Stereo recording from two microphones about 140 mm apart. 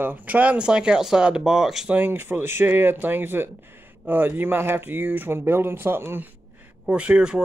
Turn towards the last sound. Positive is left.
turn(degrees=-5)  # may be behind; listen again after turning